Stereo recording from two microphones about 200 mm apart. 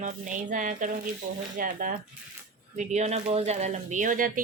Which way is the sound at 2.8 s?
35° right (ahead or behind).